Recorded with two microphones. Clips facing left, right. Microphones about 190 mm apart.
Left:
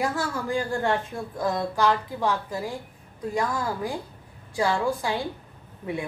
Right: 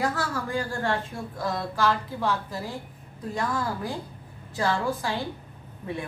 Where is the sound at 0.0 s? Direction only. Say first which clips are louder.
Left 1 dB; 20° left (ahead or behind).